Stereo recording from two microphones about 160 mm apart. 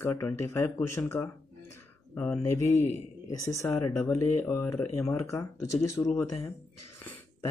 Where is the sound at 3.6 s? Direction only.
20° left (ahead or behind).